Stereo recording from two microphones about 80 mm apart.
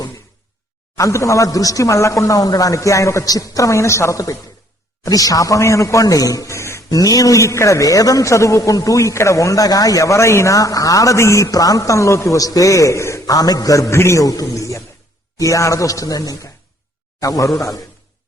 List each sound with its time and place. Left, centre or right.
0.9 s a man's voice: left
6.9 s a man's voice: left